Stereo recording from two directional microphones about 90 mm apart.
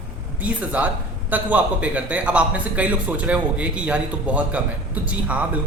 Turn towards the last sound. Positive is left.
turn(degrees=-15)  # may be behind; listen again after turning